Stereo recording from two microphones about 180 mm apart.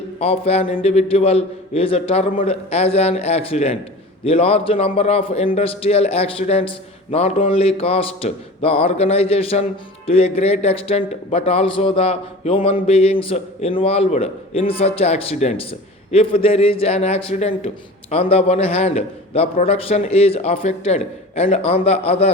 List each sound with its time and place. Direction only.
0.2 s a man's voice: 35° left (ahead or behind)